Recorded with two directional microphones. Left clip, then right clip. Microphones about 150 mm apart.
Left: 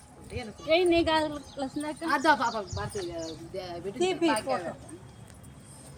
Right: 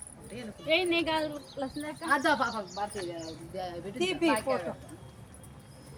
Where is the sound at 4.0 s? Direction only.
20° right (ahead or behind).